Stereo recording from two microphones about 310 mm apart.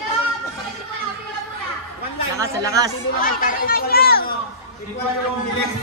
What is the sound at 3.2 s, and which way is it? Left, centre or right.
Speech, left.